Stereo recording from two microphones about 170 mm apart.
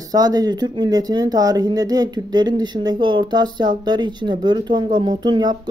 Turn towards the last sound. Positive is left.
turn(degrees=-25)  # may be behind; listen again after turning